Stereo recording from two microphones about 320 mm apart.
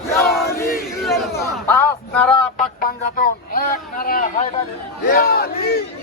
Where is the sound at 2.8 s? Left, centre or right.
Left.